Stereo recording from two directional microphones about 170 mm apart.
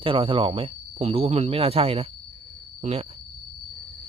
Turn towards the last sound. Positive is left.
turn(degrees=-35)  # may be behind; listen again after turning